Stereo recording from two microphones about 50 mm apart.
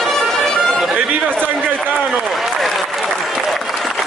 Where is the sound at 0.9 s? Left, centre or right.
Right.